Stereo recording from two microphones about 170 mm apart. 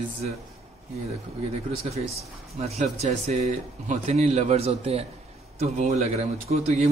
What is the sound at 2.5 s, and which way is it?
A man's voice, 40° right (ahead or behind).